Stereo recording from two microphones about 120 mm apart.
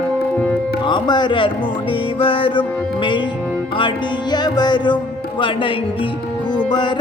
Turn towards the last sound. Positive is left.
turn(degrees=40)  # may be behind; listen again after turning